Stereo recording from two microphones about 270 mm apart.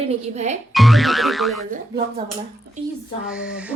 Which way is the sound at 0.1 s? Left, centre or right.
Right.